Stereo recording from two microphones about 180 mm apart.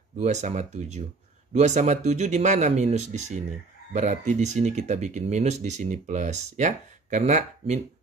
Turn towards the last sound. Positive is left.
turn(degrees=-40)  # may be behind; listen again after turning